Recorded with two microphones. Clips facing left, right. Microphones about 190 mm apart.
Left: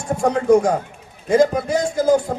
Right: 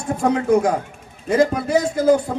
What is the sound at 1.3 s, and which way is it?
Speech, 60° right (ahead or behind).